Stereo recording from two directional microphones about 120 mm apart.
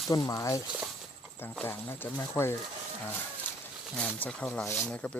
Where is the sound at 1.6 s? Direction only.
15° left (ahead or behind).